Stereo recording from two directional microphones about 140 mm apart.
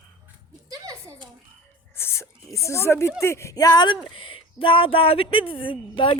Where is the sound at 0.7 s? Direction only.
25° right (ahead or behind).